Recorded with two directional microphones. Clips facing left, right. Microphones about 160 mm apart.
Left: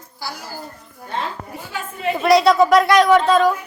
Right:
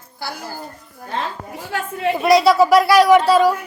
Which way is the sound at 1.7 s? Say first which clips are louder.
Right 4 dB; 70° right (ahead or behind).